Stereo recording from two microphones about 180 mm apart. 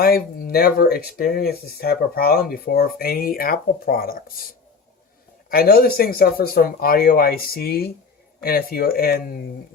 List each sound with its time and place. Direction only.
0.0 s speech: 55° left (ahead or behind)